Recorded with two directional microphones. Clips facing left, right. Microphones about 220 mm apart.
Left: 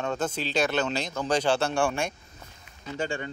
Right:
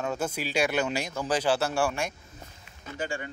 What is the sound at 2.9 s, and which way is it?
Speech, 25° left (ahead or behind).